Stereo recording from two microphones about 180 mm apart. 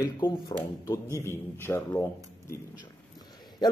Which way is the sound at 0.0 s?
20° left (ahead or behind).